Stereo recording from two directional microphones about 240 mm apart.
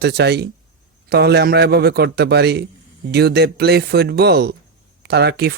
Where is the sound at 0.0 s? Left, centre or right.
Right.